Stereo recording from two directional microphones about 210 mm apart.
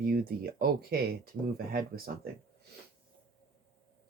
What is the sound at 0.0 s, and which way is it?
Speech, 45° right (ahead or behind).